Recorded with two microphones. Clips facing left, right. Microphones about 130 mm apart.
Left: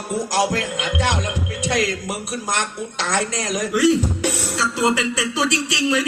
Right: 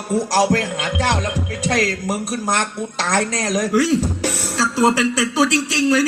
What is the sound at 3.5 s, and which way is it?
Speech, 35° right (ahead or behind).